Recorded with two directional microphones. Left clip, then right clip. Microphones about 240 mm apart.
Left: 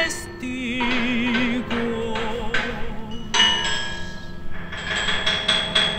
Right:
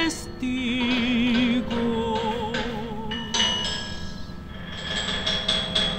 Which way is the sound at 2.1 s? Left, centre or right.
Left.